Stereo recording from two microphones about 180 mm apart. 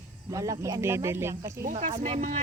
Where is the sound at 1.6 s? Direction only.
45° right (ahead or behind).